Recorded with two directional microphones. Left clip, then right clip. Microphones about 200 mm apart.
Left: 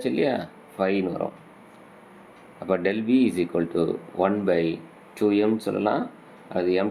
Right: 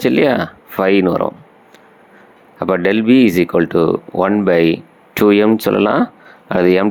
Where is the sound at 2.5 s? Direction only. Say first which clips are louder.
Right 10 dB; 40° right (ahead or behind).